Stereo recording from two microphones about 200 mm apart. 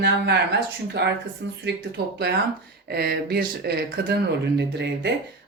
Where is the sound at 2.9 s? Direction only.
50° right (ahead or behind).